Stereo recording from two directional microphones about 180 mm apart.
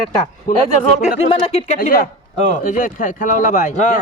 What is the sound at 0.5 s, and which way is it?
Speech, 50° left (ahead or behind).